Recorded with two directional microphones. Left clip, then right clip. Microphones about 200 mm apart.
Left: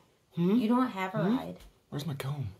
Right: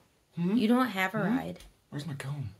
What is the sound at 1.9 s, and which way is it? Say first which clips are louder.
Speech: left 2 dB; 25° left (ahead or behind).